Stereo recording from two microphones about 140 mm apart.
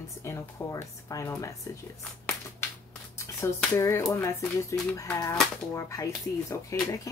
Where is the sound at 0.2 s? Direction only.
20° left (ahead or behind).